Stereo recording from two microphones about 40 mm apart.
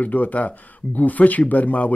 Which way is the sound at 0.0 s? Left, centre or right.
Left.